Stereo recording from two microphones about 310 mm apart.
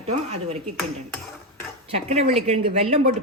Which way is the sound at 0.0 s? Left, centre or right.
Centre.